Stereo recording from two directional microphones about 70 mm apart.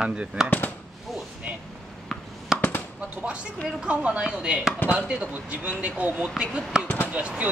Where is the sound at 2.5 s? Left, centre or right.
Left.